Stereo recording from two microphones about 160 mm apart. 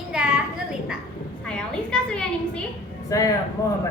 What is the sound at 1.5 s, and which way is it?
A woman's voice, 5° left (ahead or behind).